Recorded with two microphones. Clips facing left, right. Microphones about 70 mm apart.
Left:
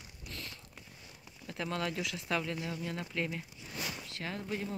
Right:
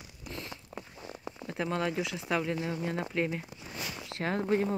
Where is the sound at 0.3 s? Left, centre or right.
Right.